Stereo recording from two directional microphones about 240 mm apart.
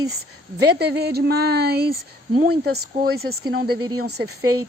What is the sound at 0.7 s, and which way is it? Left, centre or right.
Speech, right.